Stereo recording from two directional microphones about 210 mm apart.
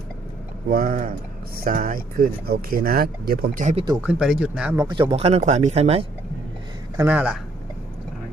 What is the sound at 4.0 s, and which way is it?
Speech, 5° right (ahead or behind).